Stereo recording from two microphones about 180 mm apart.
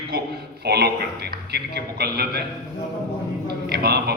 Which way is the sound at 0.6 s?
65° right (ahead or behind).